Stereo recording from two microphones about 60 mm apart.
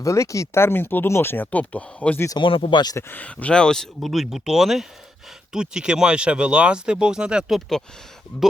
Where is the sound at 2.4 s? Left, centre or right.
Left.